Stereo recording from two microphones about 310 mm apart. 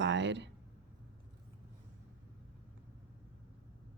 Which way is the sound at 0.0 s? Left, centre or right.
Right.